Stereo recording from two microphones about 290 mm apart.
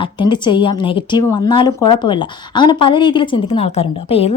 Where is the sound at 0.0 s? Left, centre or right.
Centre.